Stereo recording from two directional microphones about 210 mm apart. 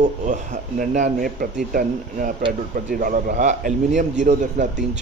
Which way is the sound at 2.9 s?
40° right (ahead or behind).